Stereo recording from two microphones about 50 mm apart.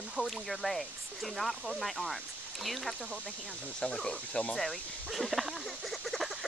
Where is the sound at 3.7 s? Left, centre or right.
Centre.